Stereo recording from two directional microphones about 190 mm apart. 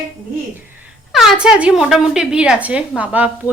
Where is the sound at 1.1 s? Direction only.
Centre (ahead or behind).